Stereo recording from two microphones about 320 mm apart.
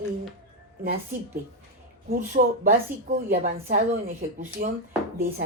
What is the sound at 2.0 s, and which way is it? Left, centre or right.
Speech, right.